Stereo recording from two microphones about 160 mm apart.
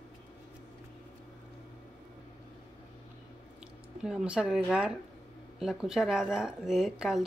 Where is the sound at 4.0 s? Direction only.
5° right (ahead or behind).